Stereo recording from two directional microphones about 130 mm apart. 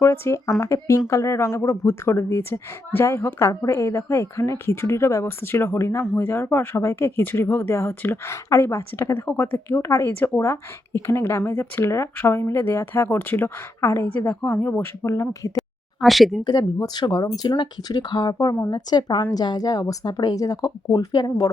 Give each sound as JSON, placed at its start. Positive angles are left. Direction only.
{"t": 0.0, "sound": "speech", "side_deg": 20}
{"t": 15.5, "sound": "a sound", "side_deg": 0}
{"t": 16.4, "sound": "a woman's voice", "side_deg": 30}